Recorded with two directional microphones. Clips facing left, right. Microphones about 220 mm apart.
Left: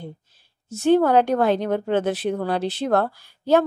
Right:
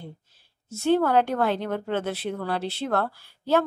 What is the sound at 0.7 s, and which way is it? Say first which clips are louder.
Speech: left 5 dB; 15° left (ahead or behind).